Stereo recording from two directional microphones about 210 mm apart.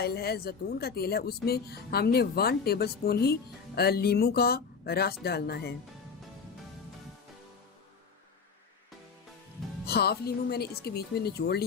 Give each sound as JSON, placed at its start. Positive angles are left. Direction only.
{"t": 0.0, "sound": "speech", "side_deg": 50}
{"t": 9.8, "sound": "speech", "side_deg": 50}